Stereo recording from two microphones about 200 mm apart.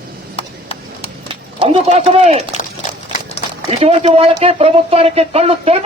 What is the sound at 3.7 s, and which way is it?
Speech, 30° right (ahead or behind).